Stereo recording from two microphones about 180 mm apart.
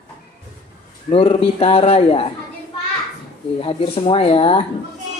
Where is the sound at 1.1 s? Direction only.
35° left (ahead or behind).